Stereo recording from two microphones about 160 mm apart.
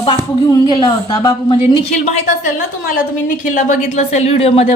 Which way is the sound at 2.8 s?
55° left (ahead or behind).